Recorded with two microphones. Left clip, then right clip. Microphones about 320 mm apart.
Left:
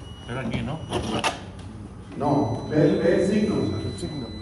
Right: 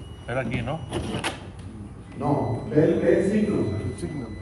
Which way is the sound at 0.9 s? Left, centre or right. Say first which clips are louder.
Left 4 dB; centre.